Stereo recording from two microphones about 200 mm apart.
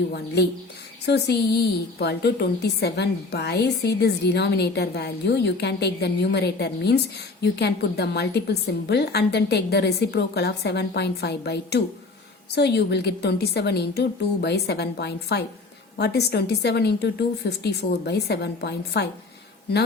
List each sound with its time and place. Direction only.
0.4 s a woman's voice: 55° left (ahead or behind)